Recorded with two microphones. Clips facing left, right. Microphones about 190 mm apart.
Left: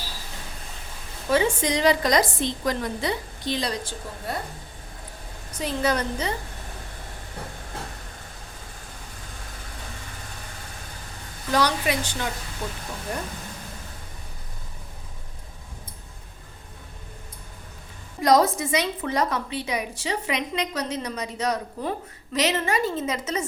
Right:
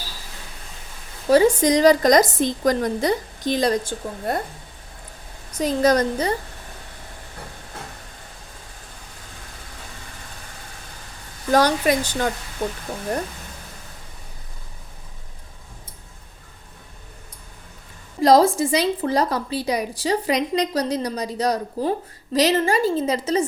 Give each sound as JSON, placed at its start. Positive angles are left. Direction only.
{"t": 1.3, "sound": "a woman's voice", "side_deg": -40}
{"t": 5.5, "sound": "a woman's voice", "side_deg": -40}
{"t": 11.5, "sound": "a woman's voice", "side_deg": -45}
{"t": 18.2, "sound": "a woman's voice", "side_deg": -30}